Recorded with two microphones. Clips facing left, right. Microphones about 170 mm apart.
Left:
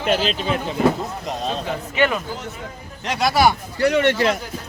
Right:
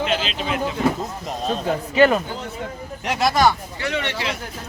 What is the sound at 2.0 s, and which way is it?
Speech, 40° right (ahead or behind).